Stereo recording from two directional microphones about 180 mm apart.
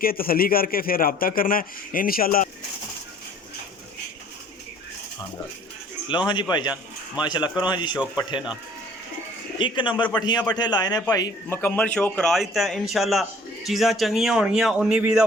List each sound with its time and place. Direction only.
0.0 s a man's voice: 55° left (ahead or behind)
6.1 s a man's voice: 25° left (ahead or behind)
9.6 s a man's voice: 25° left (ahead or behind); by 15.3 s 5° right (ahead or behind)